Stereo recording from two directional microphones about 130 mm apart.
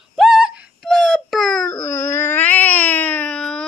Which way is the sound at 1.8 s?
20° left (ahead or behind).